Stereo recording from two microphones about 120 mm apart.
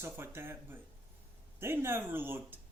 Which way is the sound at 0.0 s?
20° right (ahead or behind).